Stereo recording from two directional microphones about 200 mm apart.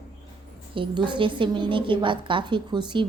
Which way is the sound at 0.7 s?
25° right (ahead or behind).